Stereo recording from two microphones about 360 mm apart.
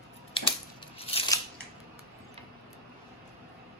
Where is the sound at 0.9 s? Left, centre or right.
Centre.